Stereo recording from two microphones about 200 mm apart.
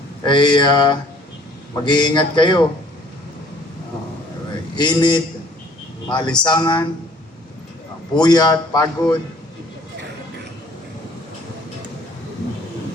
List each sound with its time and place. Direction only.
0.3 s a man's voice: 20° left (ahead or behind)
4.8 s a man's voice: 20° left (ahead or behind)
8.2 s a man's voice: 20° left (ahead or behind)